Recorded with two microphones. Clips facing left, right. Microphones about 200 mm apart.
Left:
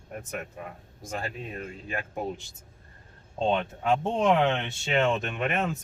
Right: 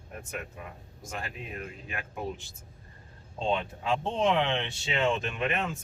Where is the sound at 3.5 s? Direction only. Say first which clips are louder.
Left 4 dB; 50° left (ahead or behind).